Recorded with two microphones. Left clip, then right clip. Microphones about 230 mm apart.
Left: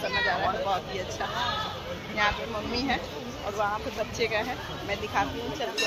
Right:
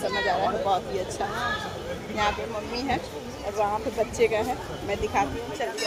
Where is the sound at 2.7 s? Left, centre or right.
Centre.